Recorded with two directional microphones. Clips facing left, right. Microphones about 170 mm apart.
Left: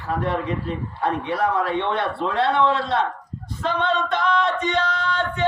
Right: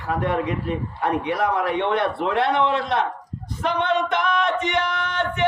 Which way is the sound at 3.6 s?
20° right (ahead or behind).